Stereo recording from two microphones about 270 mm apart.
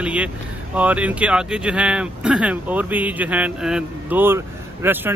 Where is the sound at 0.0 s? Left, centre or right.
Centre.